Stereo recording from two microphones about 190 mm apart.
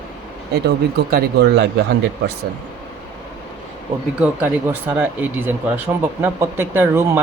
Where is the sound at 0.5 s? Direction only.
60° right (ahead or behind).